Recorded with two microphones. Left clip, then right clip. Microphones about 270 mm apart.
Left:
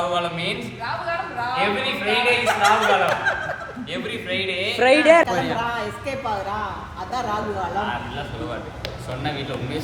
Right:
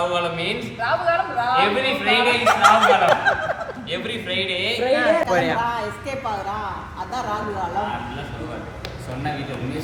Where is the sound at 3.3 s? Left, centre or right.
Centre.